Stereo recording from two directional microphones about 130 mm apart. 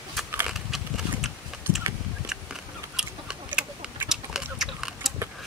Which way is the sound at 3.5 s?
5° right (ahead or behind).